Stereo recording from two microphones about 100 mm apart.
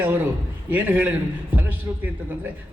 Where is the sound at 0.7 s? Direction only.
15° right (ahead or behind).